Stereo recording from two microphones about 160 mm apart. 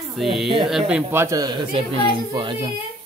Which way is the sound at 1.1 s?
15° right (ahead or behind).